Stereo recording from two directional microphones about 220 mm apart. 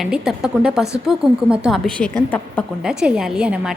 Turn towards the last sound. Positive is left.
turn(degrees=-5)  # may be behind; listen again after turning